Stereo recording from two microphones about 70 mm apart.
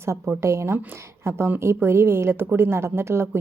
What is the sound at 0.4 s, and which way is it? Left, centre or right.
A woman's voice, right.